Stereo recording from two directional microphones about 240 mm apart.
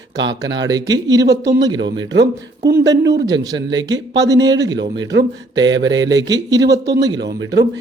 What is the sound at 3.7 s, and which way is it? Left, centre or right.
Speech, centre.